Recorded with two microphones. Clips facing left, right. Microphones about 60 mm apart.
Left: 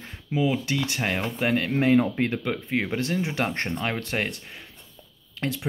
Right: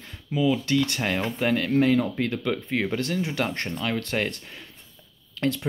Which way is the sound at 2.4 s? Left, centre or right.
Centre.